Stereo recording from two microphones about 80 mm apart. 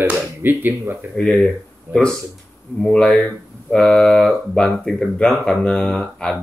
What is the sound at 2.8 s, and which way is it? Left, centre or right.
Speech, centre.